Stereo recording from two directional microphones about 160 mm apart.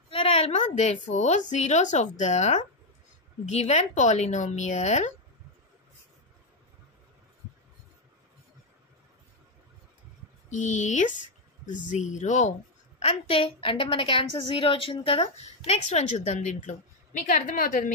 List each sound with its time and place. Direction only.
0.1 s a woman's voice: 40° left (ahead or behind)
10.5 s speech: 50° left (ahead or behind)
13.0 s a woman's voice: 40° left (ahead or behind)
17.3 s a woman's voice: 65° left (ahead or behind)